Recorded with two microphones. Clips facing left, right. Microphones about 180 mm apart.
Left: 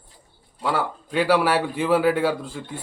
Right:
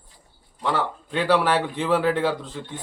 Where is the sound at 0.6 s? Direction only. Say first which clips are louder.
Even; 10° left (ahead or behind).